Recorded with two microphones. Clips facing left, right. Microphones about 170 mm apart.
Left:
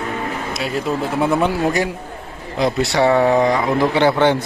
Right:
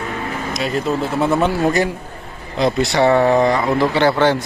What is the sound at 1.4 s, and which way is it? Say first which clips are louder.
A man's voice: right 1 dB; 10° left (ahead or behind).